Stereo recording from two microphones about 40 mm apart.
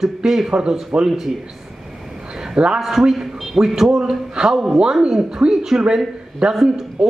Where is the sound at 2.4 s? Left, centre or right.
Centre.